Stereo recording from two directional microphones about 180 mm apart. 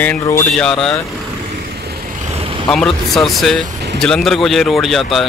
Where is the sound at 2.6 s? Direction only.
Centre (ahead or behind).